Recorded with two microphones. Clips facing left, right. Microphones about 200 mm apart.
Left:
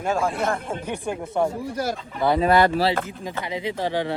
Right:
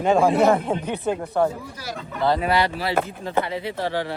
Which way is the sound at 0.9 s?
15° left (ahead or behind).